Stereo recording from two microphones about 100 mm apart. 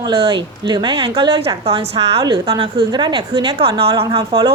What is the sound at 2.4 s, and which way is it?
Speech, 55° right (ahead or behind).